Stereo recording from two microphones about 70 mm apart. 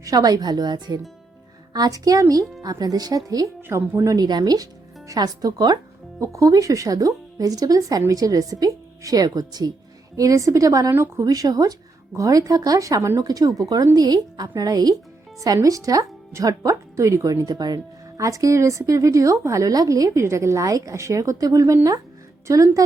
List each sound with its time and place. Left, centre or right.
0.0 s speech: right
1.7 s speech: right
3.6 s a woman's voice: right
4.2 s speech: right
6.1 s speech: right
10.2 s speech: right
10.9 s a woman's voice: right
11.3 s speech: right
13.2 s speech: right
15.5 s speech: right
18.2 s a woman's voice: right
20.1 s a woman's voice: right